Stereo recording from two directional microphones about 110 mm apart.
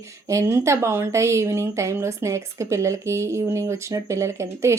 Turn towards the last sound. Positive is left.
turn(degrees=-25)  # may be behind; listen again after turning